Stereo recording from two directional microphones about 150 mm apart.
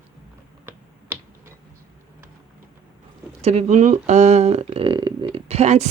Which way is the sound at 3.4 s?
45° right (ahead or behind).